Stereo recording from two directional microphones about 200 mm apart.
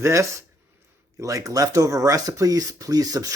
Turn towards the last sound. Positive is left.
turn(degrees=-20)  # may be behind; listen again after turning